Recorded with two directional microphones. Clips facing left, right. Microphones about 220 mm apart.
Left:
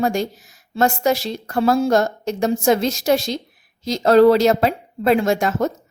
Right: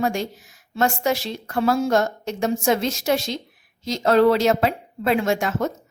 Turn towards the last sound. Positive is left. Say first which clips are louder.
# left 3 dB
turn(degrees=40)  # may be behind; listen again after turning